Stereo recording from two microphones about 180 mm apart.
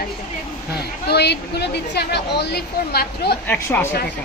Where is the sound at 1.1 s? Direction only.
65° left (ahead or behind).